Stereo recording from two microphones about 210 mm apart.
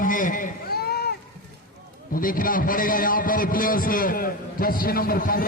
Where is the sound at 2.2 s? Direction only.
40° left (ahead or behind).